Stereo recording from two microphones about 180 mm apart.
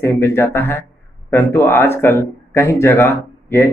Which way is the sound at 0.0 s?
15° left (ahead or behind).